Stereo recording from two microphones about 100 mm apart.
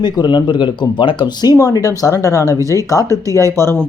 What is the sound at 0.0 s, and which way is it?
Speech, 45° left (ahead or behind).